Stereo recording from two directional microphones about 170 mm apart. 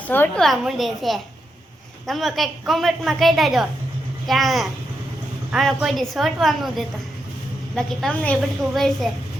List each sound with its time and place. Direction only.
0.1 s a woman's voice: 10° left (ahead or behind)
0.4 s a woman's voice: centre (ahead or behind)